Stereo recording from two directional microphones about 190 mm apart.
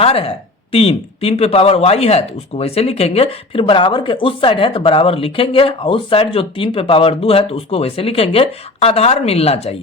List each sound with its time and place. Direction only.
0.0 s speech: 30° left (ahead or behind)